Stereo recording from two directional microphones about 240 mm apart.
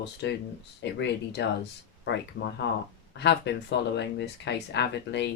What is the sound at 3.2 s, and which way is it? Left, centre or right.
Speech, left.